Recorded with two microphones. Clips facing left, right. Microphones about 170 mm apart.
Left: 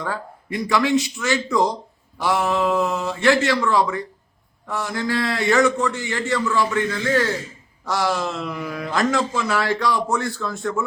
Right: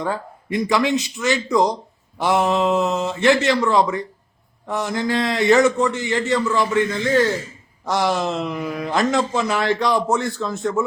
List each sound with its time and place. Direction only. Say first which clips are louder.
0.0 s a man's voice: right 3 dB; 20° right (ahead or behind)